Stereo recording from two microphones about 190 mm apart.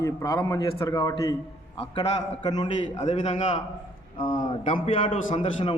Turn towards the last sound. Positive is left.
turn(degrees=30)  # may be behind; listen again after turning